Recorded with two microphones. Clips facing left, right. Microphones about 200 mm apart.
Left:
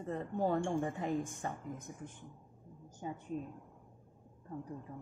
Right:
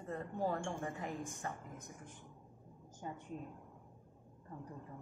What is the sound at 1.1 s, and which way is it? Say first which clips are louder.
Speech: left 6 dB; centre (ahead or behind).